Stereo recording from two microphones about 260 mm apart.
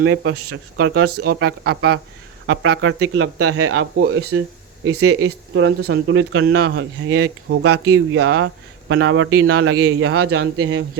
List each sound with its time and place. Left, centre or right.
0.0 s speech: right
1.6 s speech: right
2.5 s speech: right